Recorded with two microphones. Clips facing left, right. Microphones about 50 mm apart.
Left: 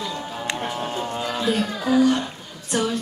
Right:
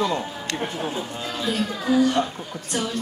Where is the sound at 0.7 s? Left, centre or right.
Left.